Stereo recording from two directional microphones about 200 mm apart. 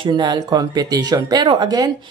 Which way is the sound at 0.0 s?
20° right (ahead or behind).